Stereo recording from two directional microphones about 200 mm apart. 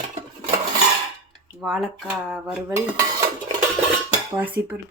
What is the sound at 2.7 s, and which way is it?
Speech, 15° right (ahead or behind).